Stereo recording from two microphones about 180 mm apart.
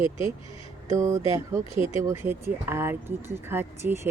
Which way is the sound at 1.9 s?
15° right (ahead or behind).